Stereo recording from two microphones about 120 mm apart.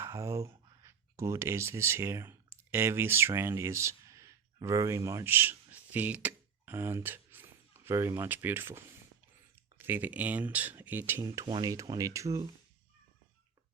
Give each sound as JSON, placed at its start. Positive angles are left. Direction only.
{"t": 0.0, "sound": "speech", "side_deg": -25}
{"t": 11.2, "sound": "speech", "side_deg": -30}